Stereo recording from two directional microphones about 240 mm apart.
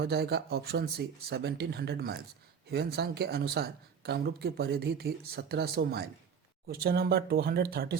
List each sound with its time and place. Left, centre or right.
0.0 s speech: right